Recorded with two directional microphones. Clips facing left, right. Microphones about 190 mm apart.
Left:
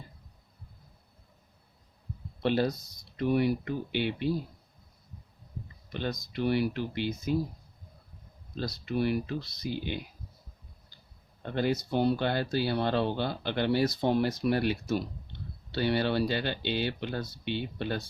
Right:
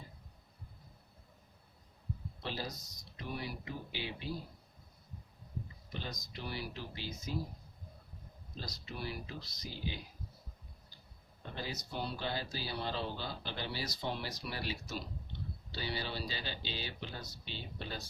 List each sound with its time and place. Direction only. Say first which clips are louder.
2.4 s speech: left 16 dB; 65° left (ahead or behind)
5.9 s speech: left 11 dB; 65° left (ahead or behind)
8.5 s speech: left 14 dB; 60° left (ahead or behind)
11.4 s speech: left 14 dB; 65° left (ahead or behind)